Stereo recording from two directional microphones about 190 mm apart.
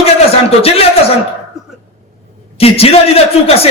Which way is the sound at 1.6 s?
Centre (ahead or behind).